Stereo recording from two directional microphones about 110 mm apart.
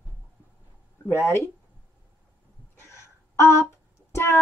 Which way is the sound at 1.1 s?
20° left (ahead or behind).